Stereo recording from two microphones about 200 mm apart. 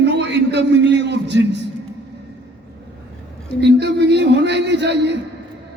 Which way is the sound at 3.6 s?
55° right (ahead or behind).